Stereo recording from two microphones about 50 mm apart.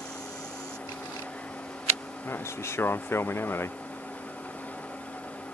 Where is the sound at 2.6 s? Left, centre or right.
Left.